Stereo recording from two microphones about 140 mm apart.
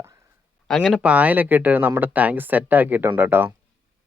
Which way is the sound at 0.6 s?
5° left (ahead or behind).